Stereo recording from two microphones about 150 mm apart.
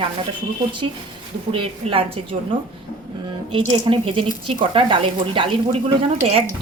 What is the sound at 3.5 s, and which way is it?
Speech, 35° right (ahead or behind).